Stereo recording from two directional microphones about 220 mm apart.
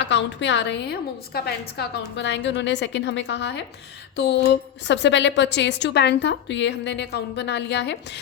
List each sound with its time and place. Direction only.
0.0 s a woman's voice: 55° left (ahead or behind)